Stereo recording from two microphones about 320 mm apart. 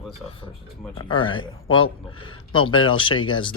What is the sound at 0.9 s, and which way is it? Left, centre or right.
Speech, centre.